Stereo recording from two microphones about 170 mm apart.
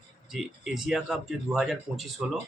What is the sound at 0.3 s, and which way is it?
Speech, centre (ahead or behind).